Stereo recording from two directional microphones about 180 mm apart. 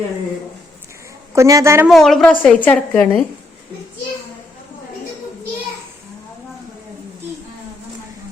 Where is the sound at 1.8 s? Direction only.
Centre (ahead or behind).